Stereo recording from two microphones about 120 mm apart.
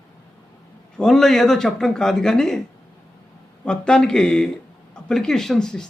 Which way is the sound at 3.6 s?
5° left (ahead or behind).